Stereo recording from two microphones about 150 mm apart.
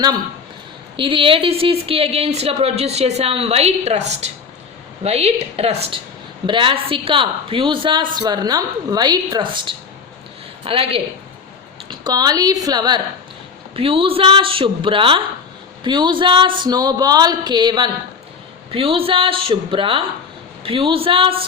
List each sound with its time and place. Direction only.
0.9 s a woman's voice: 35° right (ahead or behind)
11.9 s speech: 30° right (ahead or behind)
13.7 s a woman's voice: 35° right (ahead or behind)